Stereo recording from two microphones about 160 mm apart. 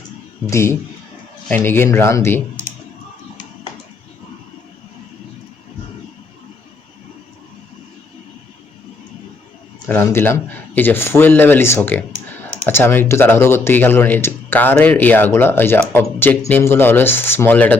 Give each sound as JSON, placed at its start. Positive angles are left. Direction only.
{"t": 0.5, "sound": "speech", "side_deg": 15}
{"t": 9.9, "sound": "speech", "side_deg": 15}